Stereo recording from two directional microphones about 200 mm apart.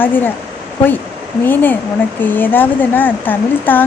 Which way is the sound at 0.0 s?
10° left (ahead or behind).